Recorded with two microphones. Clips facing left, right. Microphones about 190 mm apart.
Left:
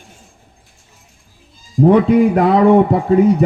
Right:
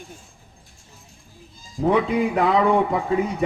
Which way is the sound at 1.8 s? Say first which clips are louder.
Left 9 dB; 40° left (ahead or behind).